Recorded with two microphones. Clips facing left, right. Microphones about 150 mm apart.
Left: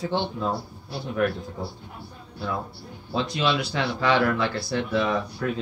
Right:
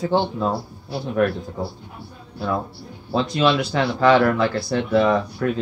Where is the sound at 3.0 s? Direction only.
40° right (ahead or behind).